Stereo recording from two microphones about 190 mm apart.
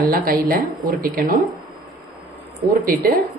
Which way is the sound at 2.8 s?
50° right (ahead or behind).